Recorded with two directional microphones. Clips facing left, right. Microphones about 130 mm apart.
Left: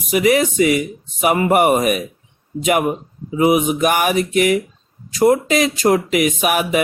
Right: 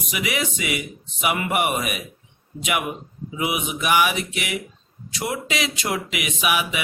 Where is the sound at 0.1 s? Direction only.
40° left (ahead or behind).